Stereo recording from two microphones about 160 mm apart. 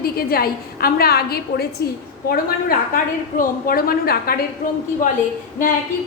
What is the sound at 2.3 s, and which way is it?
A woman's voice, 65° left (ahead or behind).